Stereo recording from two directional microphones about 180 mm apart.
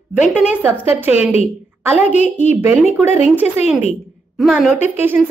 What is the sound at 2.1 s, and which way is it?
Speech, 40° left (ahead or behind).